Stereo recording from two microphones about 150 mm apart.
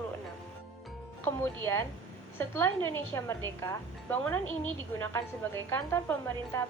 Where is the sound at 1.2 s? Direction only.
15° left (ahead or behind).